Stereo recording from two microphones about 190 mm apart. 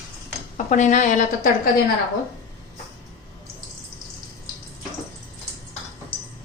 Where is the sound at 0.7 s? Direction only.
40° left (ahead or behind).